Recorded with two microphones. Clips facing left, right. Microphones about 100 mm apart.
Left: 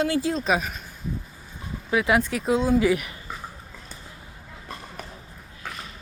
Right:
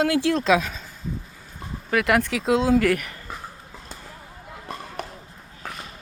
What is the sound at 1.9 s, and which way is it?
Speech, 65° right (ahead or behind).